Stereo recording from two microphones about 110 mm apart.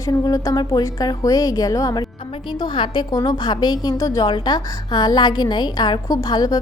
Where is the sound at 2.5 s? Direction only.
45° left (ahead or behind).